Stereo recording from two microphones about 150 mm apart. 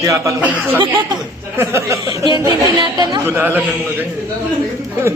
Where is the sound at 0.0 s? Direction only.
20° right (ahead or behind).